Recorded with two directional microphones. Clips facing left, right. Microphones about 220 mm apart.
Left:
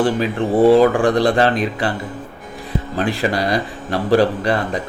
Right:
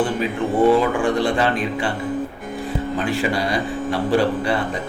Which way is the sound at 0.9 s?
90° left.